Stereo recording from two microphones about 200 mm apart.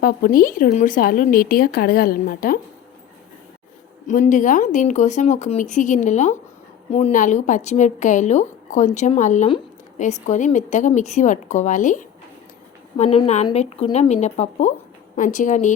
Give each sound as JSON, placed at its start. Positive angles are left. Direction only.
{"t": 0.0, "sound": "speech", "side_deg": 45}
{"t": 4.0, "sound": "a woman's voice", "side_deg": 40}